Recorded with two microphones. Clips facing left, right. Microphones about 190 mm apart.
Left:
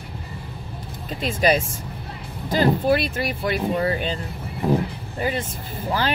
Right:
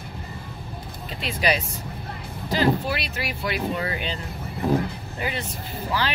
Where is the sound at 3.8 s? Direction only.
40° left (ahead or behind).